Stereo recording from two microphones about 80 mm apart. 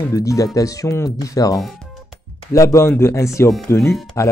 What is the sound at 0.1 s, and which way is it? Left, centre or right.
Speech, left.